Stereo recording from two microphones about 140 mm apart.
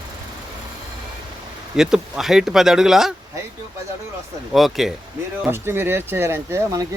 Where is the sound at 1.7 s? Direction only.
5° right (ahead or behind).